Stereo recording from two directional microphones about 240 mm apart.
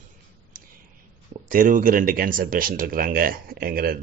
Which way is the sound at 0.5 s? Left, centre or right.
Right.